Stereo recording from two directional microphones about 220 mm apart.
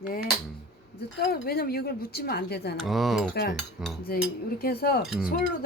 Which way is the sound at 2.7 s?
Centre (ahead or behind).